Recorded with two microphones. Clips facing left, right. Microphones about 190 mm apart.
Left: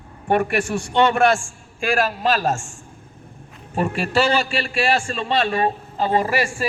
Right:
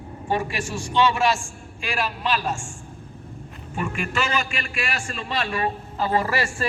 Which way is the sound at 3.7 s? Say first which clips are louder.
Left 7 dB; 35° left (ahead or behind).